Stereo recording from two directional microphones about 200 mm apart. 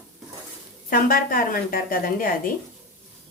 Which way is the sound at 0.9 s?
45° left (ahead or behind).